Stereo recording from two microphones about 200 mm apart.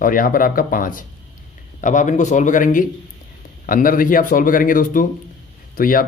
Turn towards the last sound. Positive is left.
turn(degrees=45)  # may be behind; listen again after turning